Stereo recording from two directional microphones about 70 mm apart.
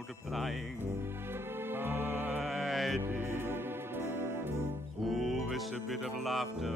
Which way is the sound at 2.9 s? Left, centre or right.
Right.